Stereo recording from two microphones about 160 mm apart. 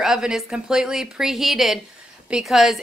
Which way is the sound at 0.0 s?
5° right (ahead or behind).